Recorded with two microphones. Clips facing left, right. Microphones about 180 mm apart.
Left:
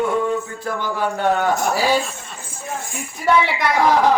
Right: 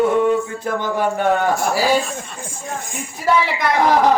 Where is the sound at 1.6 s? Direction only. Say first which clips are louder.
Right 1 dB; centre (ahead or behind).